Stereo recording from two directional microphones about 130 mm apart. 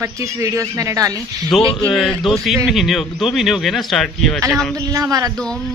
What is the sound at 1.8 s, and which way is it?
A man's voice, 5° left (ahead or behind).